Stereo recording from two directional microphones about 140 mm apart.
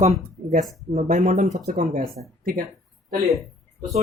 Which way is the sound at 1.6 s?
85° right.